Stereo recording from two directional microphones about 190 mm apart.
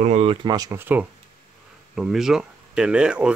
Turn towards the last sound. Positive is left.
turn(degrees=-5)  # may be behind; listen again after turning